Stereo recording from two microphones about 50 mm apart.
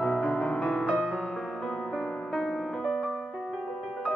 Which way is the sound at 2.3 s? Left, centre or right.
Centre.